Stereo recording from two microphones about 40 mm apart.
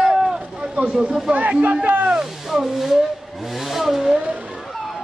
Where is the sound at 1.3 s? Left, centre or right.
Right.